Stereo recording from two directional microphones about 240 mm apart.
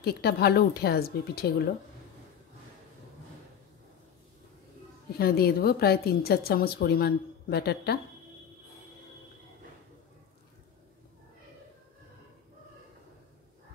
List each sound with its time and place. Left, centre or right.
0.0 s a woman's voice: left
5.2 s a woman's voice: left